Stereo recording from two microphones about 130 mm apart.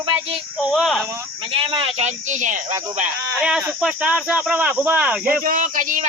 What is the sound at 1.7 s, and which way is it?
Speech, 50° right (ahead or behind).